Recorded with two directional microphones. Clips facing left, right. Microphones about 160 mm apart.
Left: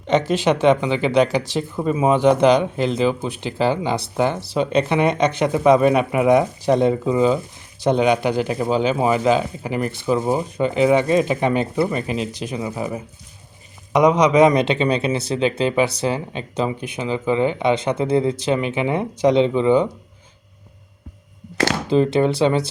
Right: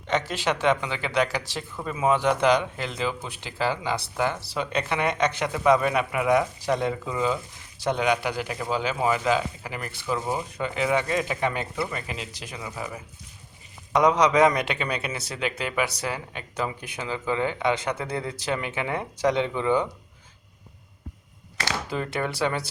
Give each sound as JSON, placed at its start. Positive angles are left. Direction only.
{"t": 0.1, "sound": "speech", "side_deg": 20}
{"t": 21.8, "sound": "speech", "side_deg": 25}